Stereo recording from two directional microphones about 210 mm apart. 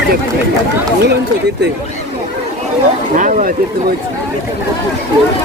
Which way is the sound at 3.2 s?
40° right (ahead or behind).